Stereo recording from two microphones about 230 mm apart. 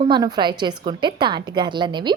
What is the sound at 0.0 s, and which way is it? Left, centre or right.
A woman's voice, centre.